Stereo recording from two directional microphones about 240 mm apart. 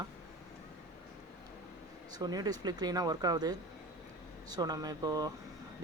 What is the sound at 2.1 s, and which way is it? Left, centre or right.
Speech, centre.